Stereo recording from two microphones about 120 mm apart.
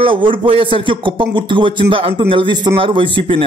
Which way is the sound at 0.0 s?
45° right (ahead or behind).